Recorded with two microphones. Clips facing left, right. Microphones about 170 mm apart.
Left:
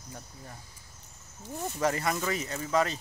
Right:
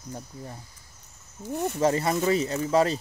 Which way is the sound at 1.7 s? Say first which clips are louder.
Right 4 dB; 25° right (ahead or behind).